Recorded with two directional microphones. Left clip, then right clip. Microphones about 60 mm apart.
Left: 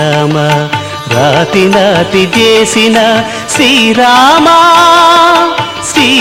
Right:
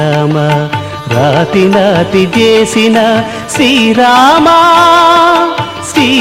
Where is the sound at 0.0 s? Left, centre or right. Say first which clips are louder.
Left 2 dB; left.